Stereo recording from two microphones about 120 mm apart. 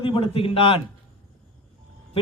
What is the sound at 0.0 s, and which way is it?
Speech, 50° left (ahead or behind).